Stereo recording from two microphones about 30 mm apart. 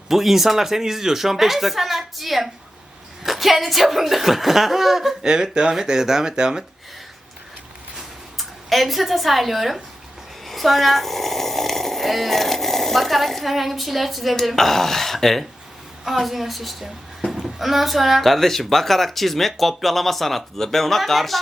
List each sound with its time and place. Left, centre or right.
0.1 s speech: centre
5.2 s speech: right
7.9 s a sound: centre
10.4 s speech: centre
14.5 s speech: centre
16.0 s speech: centre